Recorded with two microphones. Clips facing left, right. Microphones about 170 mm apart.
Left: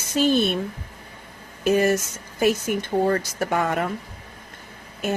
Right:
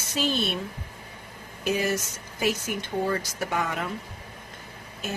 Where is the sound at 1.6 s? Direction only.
50° left (ahead or behind).